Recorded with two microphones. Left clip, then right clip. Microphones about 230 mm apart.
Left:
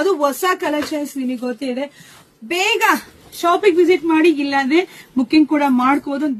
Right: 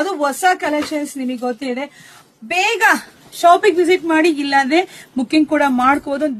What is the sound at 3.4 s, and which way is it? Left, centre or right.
Speech, right.